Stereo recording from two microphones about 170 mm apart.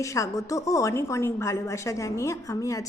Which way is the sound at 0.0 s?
20° left (ahead or behind).